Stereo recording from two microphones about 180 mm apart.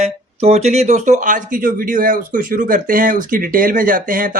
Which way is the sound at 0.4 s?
35° right (ahead or behind).